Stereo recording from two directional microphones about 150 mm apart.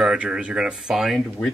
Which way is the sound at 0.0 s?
5° right (ahead or behind).